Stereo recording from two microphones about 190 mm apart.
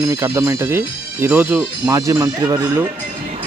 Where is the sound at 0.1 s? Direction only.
15° right (ahead or behind).